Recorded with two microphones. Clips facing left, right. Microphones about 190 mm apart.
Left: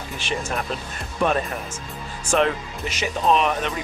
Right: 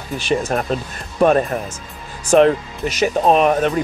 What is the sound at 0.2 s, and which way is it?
Speech, 40° right (ahead or behind).